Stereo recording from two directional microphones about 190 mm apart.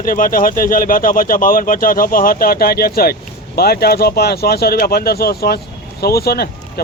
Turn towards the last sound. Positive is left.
turn(degrees=55)  # may be behind; listen again after turning